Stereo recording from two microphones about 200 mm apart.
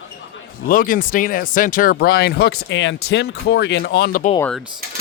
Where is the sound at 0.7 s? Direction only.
45° left (ahead or behind).